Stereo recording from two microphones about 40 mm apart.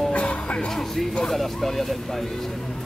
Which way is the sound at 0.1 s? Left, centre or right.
Left.